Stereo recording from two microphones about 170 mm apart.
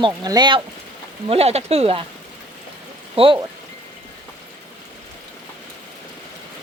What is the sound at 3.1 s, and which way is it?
Speech, 30° right (ahead or behind).